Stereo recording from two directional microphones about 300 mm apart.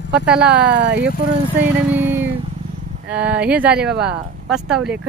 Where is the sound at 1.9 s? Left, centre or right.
Centre.